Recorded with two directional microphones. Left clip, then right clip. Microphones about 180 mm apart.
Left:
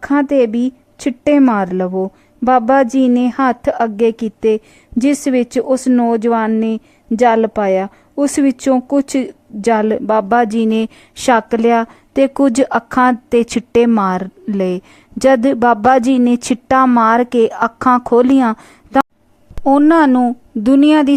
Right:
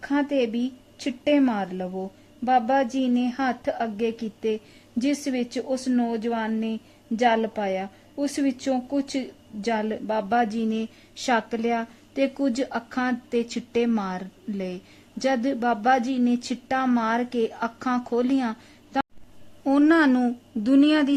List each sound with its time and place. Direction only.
0.0 s speech: 45° left (ahead or behind)